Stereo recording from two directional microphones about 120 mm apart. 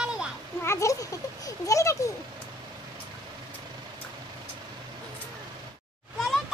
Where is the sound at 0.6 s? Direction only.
25° left (ahead or behind).